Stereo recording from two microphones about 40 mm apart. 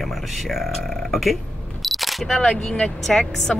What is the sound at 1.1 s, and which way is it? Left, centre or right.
Single-lens reflex camera, centre.